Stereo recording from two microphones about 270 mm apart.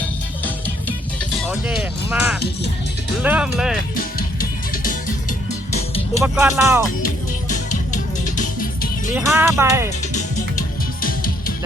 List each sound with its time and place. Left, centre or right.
1.4 s music: centre
3.2 s speech: centre
3.9 s music: left
6.2 s speech: centre
7.0 s music: left
9.1 s speech: centre
10.1 s music: left